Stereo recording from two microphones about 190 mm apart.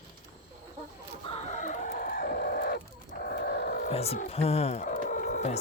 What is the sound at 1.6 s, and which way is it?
Chicken, 40° left (ahead or behind).